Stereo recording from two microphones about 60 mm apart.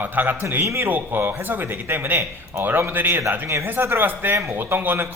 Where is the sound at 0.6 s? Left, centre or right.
Right.